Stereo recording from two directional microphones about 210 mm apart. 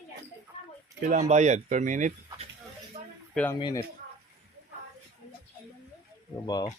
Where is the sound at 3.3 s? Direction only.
5° left (ahead or behind).